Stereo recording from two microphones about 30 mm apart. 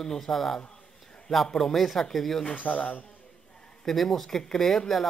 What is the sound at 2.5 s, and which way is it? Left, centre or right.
Speech, left.